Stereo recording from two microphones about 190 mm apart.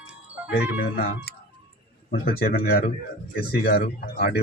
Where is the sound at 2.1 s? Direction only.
55° left (ahead or behind).